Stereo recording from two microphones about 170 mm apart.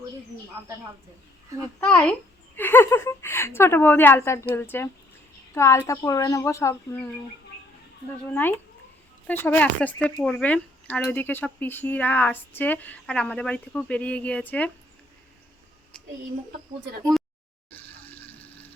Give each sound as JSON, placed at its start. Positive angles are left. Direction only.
{"t": 1.8, "sound": "speech", "side_deg": 10}
{"t": 9.2, "sound": "speech", "side_deg": 10}
{"t": 17.7, "sound": "water", "side_deg": 10}